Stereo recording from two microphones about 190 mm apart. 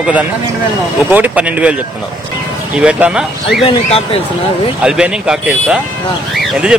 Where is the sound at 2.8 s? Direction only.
5° right (ahead or behind).